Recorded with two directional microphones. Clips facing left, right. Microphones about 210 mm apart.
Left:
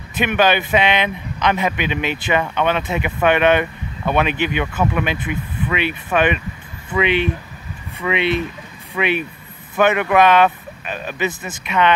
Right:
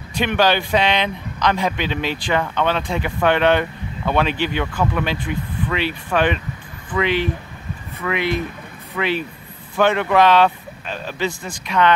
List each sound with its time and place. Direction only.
0.2 s speech: 15° left (ahead or behind)